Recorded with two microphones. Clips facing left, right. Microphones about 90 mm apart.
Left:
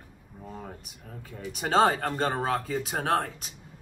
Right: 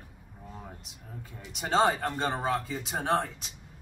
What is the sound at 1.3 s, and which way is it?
Speech, 50° left (ahead or behind).